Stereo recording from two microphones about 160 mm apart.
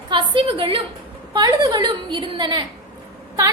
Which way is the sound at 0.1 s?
30° right (ahead or behind).